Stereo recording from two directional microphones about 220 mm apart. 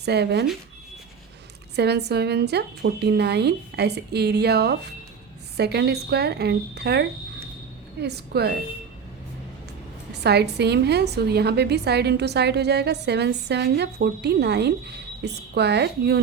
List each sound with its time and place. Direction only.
0.0 s a woman's voice: 50° right (ahead or behind)
1.7 s a woman's voice: 50° right (ahead or behind)
10.1 s a woman's voice: 50° right (ahead or behind)